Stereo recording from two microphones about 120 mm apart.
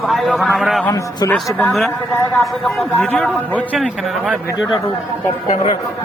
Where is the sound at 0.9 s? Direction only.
30° left (ahead or behind).